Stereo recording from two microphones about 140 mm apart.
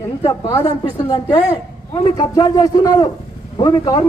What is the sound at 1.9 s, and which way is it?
A man's voice, 35° left (ahead or behind).